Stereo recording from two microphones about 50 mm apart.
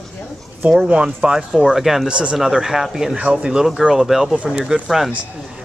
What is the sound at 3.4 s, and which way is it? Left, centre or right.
Speech, centre.